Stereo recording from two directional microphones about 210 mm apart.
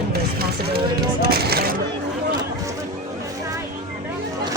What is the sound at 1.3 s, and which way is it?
Speech, 50° right (ahead or behind).